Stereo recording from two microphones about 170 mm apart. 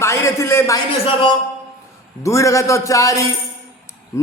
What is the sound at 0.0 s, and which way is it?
Speech, 15° left (ahead or behind).